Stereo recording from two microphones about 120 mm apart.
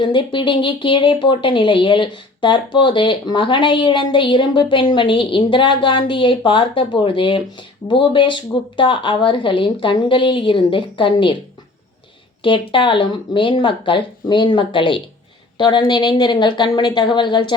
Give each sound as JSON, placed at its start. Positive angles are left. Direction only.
{"t": 0.0, "sound": "speech", "side_deg": 40}
{"t": 12.4, "sound": "speech", "side_deg": 45}